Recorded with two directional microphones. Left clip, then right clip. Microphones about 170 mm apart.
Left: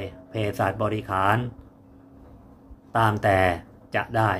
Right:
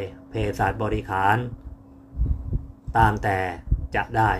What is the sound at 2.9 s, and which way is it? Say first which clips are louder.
Speech: even; 20° left (ahead or behind).